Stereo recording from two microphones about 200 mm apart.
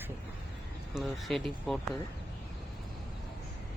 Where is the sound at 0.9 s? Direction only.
Centre (ahead or behind).